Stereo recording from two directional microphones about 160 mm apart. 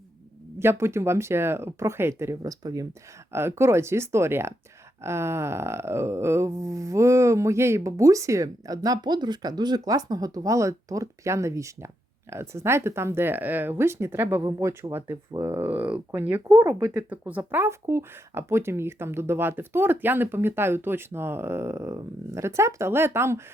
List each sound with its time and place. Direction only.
0.6 s speech: 15° right (ahead or behind)
5.0 s a sound: 15° right (ahead or behind)
12.3 s speech: 15° right (ahead or behind)